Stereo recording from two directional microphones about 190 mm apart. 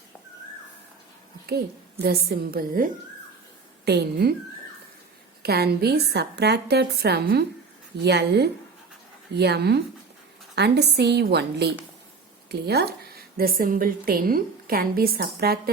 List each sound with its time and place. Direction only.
1.5 s a woman's voice: 55° right (ahead or behind)
5.4 s a woman's voice: 55° right (ahead or behind)